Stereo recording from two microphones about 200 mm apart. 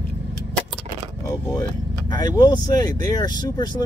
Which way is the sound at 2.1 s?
20° left (ahead or behind).